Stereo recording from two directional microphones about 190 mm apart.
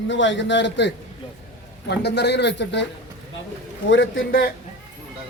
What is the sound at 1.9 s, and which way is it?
Speech, 60° left (ahead or behind).